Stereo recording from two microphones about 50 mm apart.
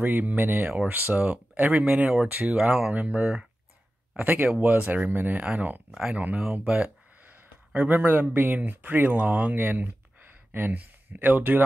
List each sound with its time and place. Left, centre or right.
0.0 s speech: right
5.0 s speech: right
5.9 s speech: centre
6.1 s speech: right
7.2 s a sound: right
8.0 s speech: right
9.6 s speech: right